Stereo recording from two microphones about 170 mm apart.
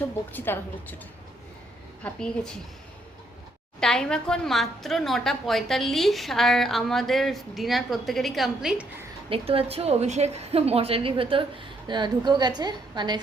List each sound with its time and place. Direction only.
0.3 s a woman's voice: 10° left (ahead or behind)
2.0 s a woman's voice: 5° left (ahead or behind)
3.8 s a woman's voice: 5° left (ahead or behind)
9.3 s a woman's voice: 35° right (ahead or behind)